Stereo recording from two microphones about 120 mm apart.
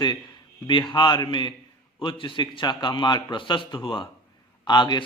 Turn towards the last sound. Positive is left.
turn(degrees=35)  # may be behind; listen again after turning